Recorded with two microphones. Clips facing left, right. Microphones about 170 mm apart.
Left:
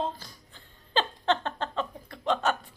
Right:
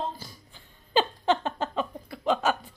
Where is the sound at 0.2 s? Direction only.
10° right (ahead or behind).